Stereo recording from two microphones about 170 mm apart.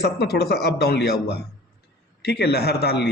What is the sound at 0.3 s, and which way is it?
A man's voice, 70° left (ahead or behind).